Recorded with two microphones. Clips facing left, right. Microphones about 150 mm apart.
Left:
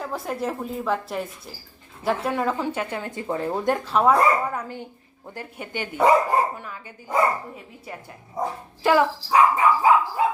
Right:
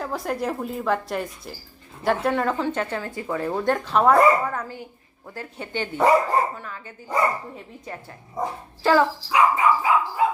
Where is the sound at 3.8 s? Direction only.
5° left (ahead or behind).